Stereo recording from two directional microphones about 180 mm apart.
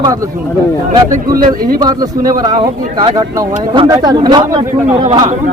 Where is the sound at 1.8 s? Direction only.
20° right (ahead or behind).